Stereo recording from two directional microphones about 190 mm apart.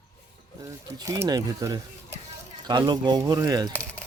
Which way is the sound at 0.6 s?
15° right (ahead or behind).